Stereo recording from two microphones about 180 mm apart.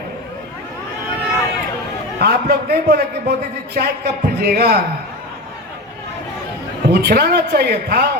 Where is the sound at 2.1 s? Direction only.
60° right (ahead or behind).